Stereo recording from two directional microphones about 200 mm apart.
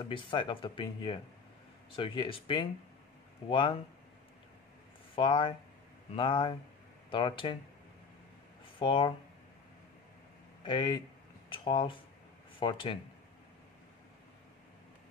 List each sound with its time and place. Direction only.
0.0 s speech: 25° left (ahead or behind)
5.1 s speech: 25° left (ahead or behind)
8.7 s speech: 25° left (ahead or behind)
10.6 s speech: 25° left (ahead or behind)